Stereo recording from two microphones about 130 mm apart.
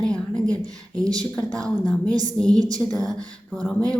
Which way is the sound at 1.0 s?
30° right (ahead or behind).